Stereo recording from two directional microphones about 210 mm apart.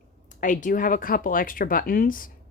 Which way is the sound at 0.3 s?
40° left (ahead or behind).